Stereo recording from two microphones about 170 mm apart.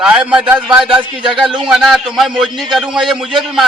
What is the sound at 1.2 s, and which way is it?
Speech, 30° right (ahead or behind).